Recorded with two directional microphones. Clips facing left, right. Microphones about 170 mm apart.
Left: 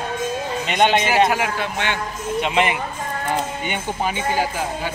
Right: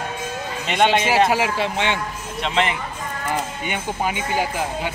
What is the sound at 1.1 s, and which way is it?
Speech, 30° right (ahead or behind).